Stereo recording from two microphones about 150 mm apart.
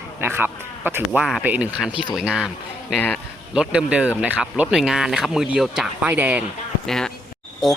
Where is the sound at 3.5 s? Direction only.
5° right (ahead or behind).